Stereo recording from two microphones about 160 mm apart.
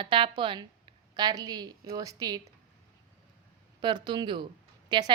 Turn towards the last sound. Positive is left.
turn(degrees=-30)  # may be behind; listen again after turning